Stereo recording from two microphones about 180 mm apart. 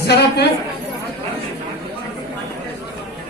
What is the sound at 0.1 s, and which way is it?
Speech, 65° left (ahead or behind).